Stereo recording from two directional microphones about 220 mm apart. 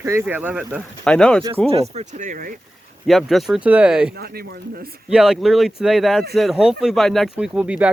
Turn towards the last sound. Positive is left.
turn(degrees=-5)  # may be behind; listen again after turning